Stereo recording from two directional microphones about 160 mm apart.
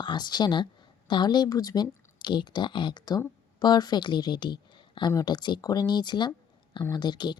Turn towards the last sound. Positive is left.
turn(degrees=25)  # may be behind; listen again after turning